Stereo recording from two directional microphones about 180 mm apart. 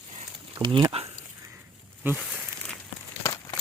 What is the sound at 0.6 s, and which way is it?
Speech, 25° right (ahead or behind).